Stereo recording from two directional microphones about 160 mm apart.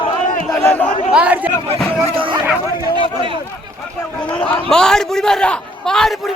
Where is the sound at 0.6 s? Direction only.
10° left (ahead or behind).